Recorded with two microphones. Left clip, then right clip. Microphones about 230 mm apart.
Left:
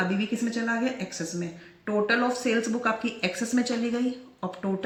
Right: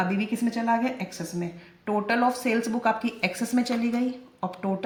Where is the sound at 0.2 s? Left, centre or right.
Right.